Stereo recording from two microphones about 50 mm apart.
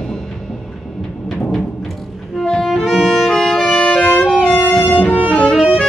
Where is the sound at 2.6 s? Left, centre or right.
Centre.